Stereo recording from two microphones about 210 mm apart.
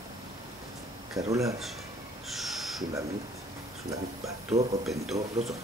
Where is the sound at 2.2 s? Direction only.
Centre (ahead or behind).